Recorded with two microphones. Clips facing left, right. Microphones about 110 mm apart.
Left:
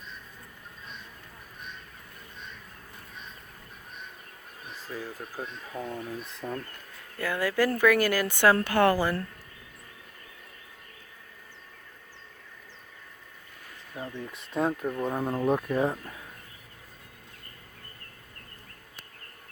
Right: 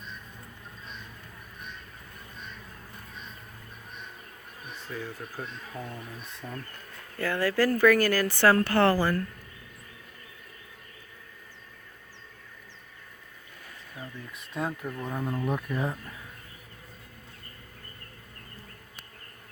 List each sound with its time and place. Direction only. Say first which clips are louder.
4.9 s speech: even; 10° left (ahead or behind)
6.4 s speech: left 5 dB; 35° left (ahead or behind)
7.2 s speech: right 1 dB; 10° left (ahead or behind)
13.9 s insect: left 6 dB; 35° left (ahead or behind)
14.5 s speech: left 5 dB; 20° left (ahead or behind)